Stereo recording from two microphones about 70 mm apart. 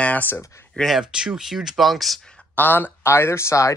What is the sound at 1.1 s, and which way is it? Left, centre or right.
Speech, centre.